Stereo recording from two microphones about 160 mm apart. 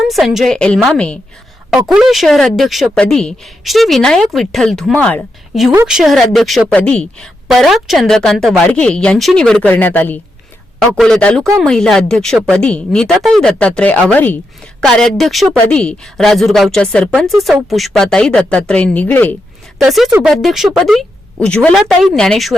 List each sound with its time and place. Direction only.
0.0 s a woman's voice: centre (ahead or behind)
10.8 s a woman's voice: centre (ahead or behind)
19.8 s a woman's voice: centre (ahead or behind)